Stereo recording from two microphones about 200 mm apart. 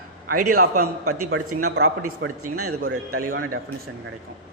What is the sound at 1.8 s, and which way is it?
Speech, 45° right (ahead or behind).